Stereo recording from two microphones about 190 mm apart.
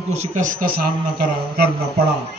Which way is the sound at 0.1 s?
35° right (ahead or behind).